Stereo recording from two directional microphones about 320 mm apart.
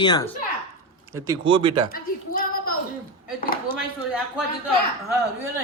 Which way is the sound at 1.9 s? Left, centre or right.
Left.